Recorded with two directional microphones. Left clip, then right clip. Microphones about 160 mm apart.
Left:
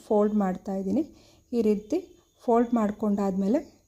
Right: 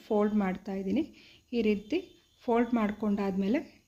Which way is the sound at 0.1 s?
30° left (ahead or behind).